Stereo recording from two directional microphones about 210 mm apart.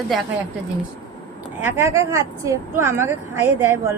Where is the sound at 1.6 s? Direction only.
10° right (ahead or behind).